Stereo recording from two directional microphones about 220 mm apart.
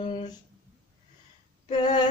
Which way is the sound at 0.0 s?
20° left (ahead or behind).